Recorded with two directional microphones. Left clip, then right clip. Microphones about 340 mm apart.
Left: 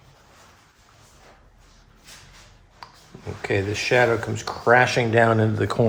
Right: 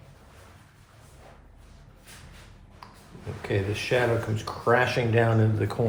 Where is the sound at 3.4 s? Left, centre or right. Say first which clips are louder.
Left 5 dB; left.